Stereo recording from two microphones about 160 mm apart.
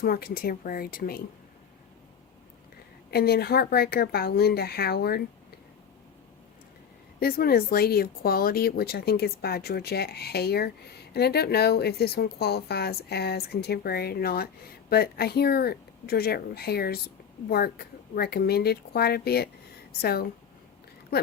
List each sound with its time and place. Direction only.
0.0 s speech: 75° left (ahead or behind)
3.1 s speech: 80° left
7.2 s speech: 70° left (ahead or behind)